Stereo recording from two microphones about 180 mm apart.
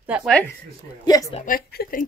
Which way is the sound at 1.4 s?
55° left (ahead or behind).